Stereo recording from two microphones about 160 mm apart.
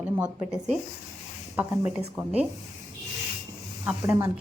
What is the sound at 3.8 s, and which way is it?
Speech, 15° right (ahead or behind).